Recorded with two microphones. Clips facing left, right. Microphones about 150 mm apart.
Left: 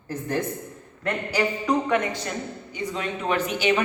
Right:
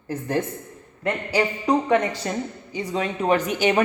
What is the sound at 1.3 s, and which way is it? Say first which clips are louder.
A woman's voice: right 2 dB; 30° right (ahead or behind).